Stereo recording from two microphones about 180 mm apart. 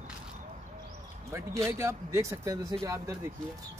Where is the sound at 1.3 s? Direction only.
15° right (ahead or behind).